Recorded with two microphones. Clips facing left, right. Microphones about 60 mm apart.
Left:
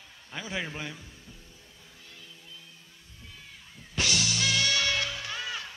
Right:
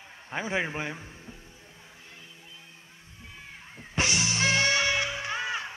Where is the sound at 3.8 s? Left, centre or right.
Right.